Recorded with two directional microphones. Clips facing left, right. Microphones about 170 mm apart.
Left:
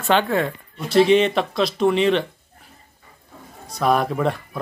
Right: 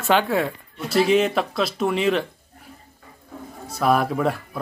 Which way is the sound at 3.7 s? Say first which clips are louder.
Even; 5° right (ahead or behind).